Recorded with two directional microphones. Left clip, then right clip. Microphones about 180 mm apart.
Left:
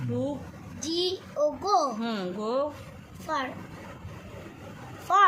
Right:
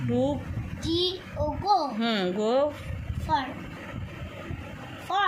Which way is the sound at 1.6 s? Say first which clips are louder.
Right 2 dB; 50° left (ahead or behind).